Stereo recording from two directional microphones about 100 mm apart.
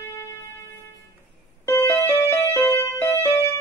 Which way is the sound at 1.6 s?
25° left (ahead or behind).